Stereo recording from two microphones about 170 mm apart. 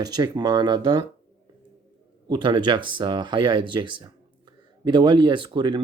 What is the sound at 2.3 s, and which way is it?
Speech, 25° right (ahead or behind).